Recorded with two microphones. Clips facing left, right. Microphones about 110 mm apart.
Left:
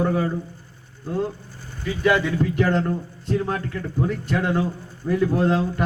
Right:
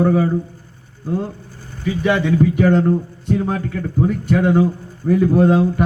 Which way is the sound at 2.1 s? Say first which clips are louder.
Right 5 dB; 15° right (ahead or behind).